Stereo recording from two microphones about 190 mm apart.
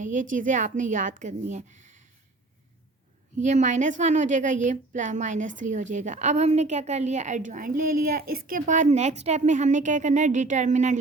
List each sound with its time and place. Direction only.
0.0 s a woman's voice: 45° right (ahead or behind)
3.4 s a woman's voice: 40° right (ahead or behind)